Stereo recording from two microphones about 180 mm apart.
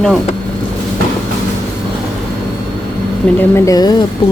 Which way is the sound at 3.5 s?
20° left (ahead or behind).